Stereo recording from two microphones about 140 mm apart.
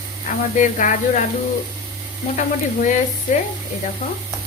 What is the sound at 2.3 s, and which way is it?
Speech, 65° left (ahead or behind).